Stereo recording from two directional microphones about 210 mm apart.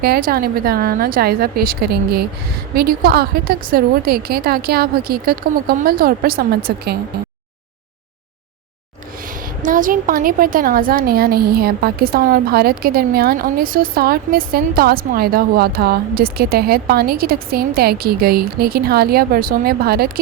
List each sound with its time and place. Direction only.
0.0 s a woman's voice: 45° right (ahead or behind)
9.6 s a woman's voice: 40° right (ahead or behind)